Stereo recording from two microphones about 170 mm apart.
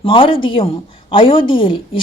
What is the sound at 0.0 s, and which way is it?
A woman's voice, 30° left (ahead or behind).